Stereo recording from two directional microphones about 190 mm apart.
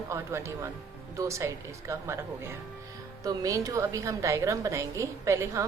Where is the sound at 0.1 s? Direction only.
15° right (ahead or behind).